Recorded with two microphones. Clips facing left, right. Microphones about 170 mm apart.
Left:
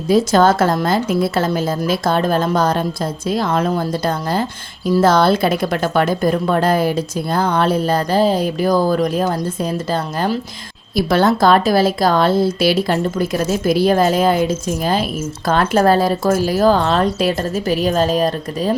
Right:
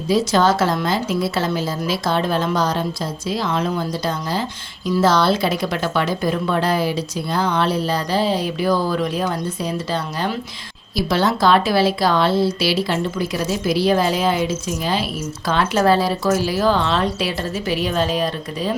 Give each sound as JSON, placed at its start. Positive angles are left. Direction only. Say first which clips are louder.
{"t": 0.1, "sound": "a woman's voice", "louder": "left 4 dB", "side_deg": 50}